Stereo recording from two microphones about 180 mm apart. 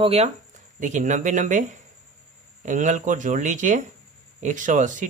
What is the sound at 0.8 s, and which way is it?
Speech, 45° right (ahead or behind).